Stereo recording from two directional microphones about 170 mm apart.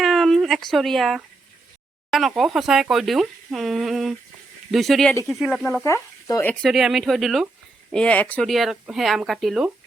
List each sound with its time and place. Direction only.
0.0 s a sound: centre (ahead or behind)
2.0 s speech: centre (ahead or behind)
5.8 s speech: 20° left (ahead or behind)
6.5 s speech: centre (ahead or behind)